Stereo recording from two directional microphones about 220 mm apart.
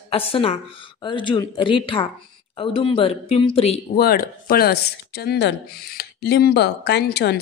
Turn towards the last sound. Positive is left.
turn(degrees=50)  # may be behind; listen again after turning